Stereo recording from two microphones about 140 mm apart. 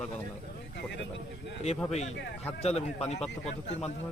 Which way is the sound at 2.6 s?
50° left (ahead or behind).